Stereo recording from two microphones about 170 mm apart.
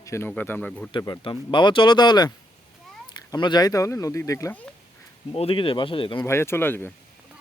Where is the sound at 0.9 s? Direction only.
25° left (ahead or behind).